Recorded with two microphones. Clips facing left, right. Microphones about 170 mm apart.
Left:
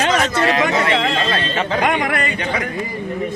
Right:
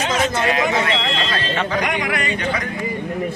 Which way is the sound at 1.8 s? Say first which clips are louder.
Left 4 dB; 55° left (ahead or behind).